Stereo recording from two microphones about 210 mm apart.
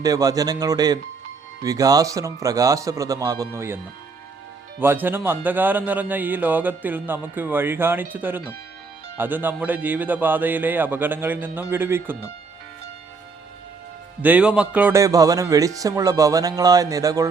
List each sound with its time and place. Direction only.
0.0 s a man's voice: 15° right (ahead or behind)
4.8 s a man's voice: 10° right (ahead or behind)
14.2 s a man's voice: 5° right (ahead or behind)